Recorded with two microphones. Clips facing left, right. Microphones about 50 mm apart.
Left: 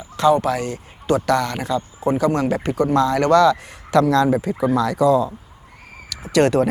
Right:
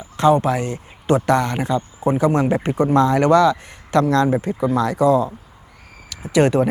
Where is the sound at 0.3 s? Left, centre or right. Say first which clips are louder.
Right 1 dB; right.